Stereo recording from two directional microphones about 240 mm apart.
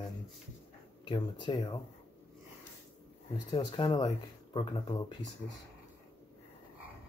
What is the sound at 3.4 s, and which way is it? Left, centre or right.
Speech, centre.